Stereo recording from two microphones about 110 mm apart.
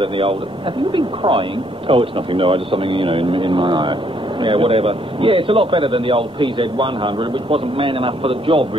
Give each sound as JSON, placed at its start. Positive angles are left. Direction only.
{"t": 0.0, "sound": "a man's voice", "side_deg": -55}